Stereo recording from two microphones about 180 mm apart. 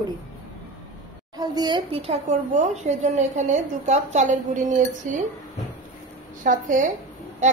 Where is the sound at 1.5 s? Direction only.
25° right (ahead or behind); by 5.2 s 45° right (ahead or behind).